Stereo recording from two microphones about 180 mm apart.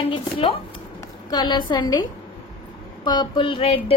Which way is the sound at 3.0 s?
25° left (ahead or behind).